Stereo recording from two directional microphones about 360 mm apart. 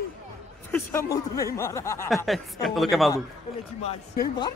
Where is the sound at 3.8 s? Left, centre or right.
Centre.